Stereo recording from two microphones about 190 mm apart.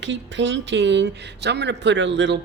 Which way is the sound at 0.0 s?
70° right (ahead or behind).